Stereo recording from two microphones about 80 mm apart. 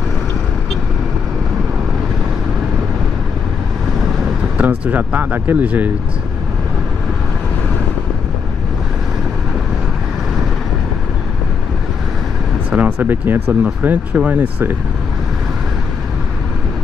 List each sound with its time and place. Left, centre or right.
4.6 s speech: centre
12.6 s speech: centre